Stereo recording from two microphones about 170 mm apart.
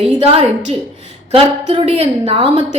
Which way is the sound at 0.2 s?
35° right (ahead or behind).